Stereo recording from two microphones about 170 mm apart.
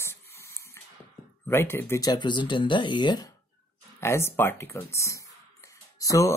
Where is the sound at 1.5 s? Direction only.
15° left (ahead or behind).